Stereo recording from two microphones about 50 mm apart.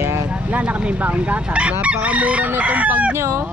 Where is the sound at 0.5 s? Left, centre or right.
Right.